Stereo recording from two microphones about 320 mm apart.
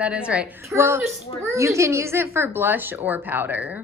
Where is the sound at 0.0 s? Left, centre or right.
Centre.